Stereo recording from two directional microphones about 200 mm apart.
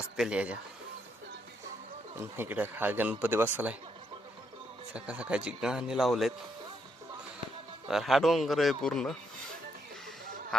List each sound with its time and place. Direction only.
0.2 s speech: 5° right (ahead or behind)
2.1 s speech: 10° right (ahead or behind)
4.9 s speech: 5° right (ahead or behind)
7.9 s speech: centre (ahead or behind)
10.5 s speech: 5° left (ahead or behind)